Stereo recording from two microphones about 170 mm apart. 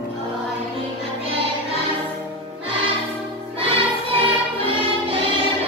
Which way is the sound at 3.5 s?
30° right (ahead or behind).